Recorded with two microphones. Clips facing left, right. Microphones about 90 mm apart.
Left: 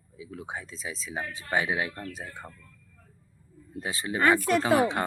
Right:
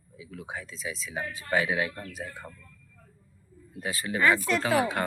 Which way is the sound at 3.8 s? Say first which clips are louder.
Even; 25° left (ahead or behind).